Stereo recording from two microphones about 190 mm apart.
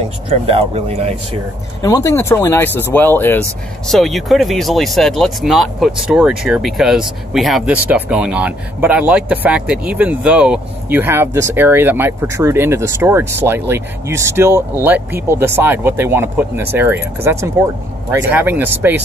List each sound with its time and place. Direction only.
0.3 s speech: 30° right (ahead or behind)
1.8 s speech: 20° left (ahead or behind); by 18.9 s 10° right (ahead or behind)